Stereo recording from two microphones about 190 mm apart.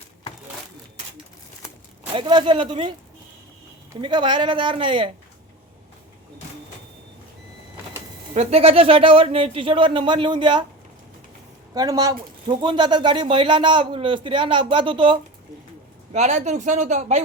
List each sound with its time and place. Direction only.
2.1 s speech: 25° right (ahead or behind)
4.0 s speech: 25° right (ahead or behind)
8.3 s speech: 35° right (ahead or behind)
11.7 s speech: 20° right (ahead or behind)
16.1 s speech: 35° right (ahead or behind)